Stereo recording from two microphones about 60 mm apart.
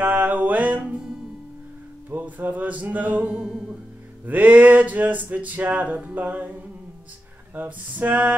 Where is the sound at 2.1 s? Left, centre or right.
Right.